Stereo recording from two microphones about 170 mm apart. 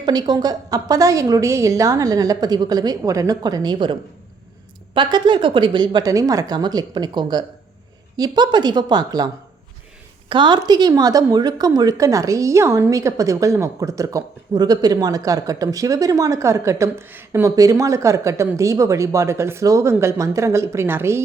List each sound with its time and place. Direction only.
0.0 s a woman's voice: 25° right (ahead or behind)
4.9 s a woman's voice: 30° right (ahead or behind)